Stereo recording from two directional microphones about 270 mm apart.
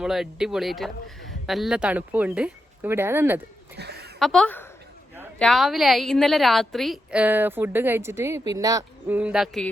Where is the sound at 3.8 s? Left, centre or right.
Right.